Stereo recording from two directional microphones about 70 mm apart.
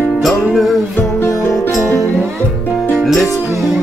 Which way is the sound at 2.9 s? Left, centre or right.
Centre.